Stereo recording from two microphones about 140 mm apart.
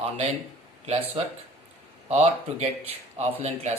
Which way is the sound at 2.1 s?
50° right (ahead or behind).